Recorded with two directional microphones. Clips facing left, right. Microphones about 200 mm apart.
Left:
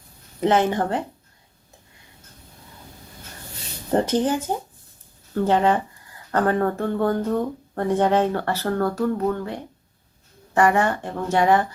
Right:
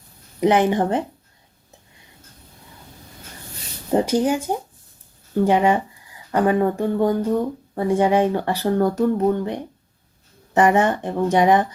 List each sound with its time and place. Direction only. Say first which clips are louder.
0.3 s speech: right 3 dB; 15° right (ahead or behind)
3.9 s speech: right 2 dB; 10° right (ahead or behind)